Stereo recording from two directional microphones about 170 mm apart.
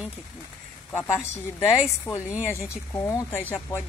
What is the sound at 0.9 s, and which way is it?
Speech, 15° left (ahead or behind).